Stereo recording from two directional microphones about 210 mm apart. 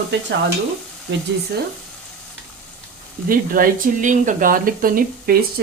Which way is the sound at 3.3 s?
40° right (ahead or behind).